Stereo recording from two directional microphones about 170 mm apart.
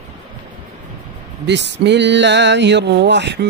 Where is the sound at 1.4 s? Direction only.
90° right.